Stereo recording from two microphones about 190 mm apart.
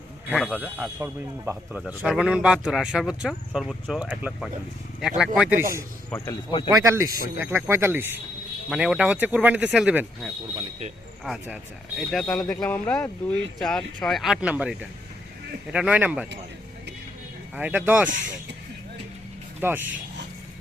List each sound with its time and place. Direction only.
0.3 s speech: centre (ahead or behind)
6.1 s speech: 15° left (ahead or behind)
6.7 s speech: 15° right (ahead or behind)
17.5 s speech: 10° right (ahead or behind)
19.5 s speech: 10° right (ahead or behind)